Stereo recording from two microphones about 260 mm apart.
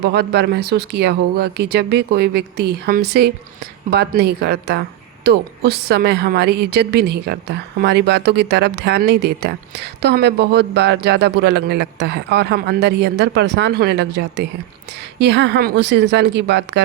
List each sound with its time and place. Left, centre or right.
0.0 s speech: right